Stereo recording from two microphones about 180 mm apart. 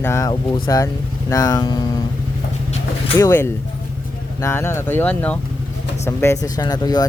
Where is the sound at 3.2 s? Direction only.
15° left (ahead or behind).